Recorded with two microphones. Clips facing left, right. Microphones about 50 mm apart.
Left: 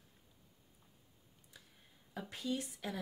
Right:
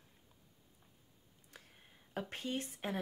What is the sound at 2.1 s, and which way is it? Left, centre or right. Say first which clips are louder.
Speech: even; right.